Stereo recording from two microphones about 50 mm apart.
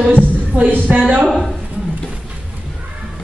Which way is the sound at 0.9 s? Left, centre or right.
Right.